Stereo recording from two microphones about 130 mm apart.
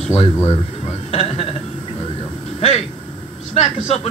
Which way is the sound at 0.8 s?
50° left (ahead or behind).